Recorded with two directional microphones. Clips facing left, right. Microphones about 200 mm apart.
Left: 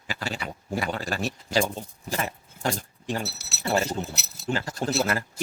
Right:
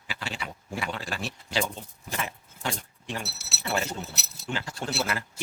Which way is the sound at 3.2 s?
Centre (ahead or behind).